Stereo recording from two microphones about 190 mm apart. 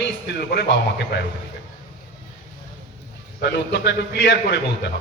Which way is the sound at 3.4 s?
65° left (ahead or behind).